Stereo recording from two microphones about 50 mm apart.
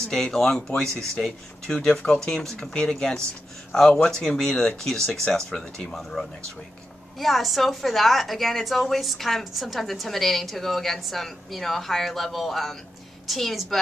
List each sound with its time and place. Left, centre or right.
0.1 s a woman's voice: centre